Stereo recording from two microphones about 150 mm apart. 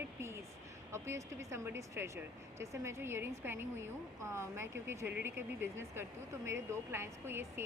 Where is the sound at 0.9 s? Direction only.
20° right (ahead or behind).